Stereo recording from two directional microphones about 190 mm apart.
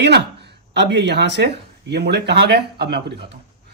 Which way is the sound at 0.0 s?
60° right (ahead or behind).